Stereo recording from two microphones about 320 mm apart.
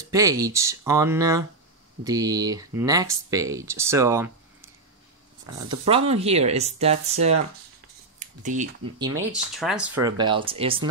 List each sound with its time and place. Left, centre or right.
0.0 s speech: centre
8.2 s a sound: right
8.9 s speech: centre
9.3 s speech: centre
10.0 s speech: centre